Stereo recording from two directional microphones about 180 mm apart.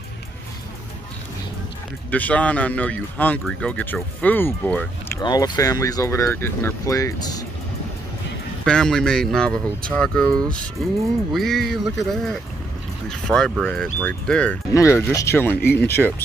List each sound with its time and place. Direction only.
2.0 s speech: 10° left (ahead or behind)
8.6 s speech: 5° left (ahead or behind)
14.7 s speech: 15° left (ahead or behind)